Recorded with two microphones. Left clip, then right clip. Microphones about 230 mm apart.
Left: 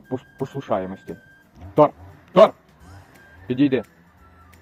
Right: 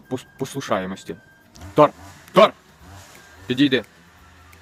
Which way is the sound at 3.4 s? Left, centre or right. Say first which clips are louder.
Right 1 dB; centre.